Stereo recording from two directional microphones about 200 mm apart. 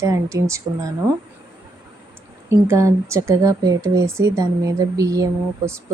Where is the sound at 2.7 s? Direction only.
15° right (ahead or behind).